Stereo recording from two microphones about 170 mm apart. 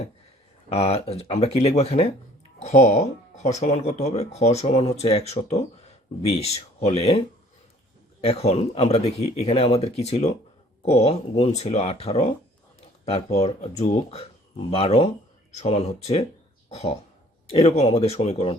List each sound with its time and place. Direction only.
0.7 s speech: 40° left (ahead or behind)
8.2 s speech: 35° left (ahead or behind)
16.6 s a sound: 40° left (ahead or behind)
17.5 s speech: 35° left (ahead or behind)